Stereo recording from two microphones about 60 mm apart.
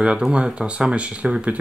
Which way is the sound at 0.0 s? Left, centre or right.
Centre.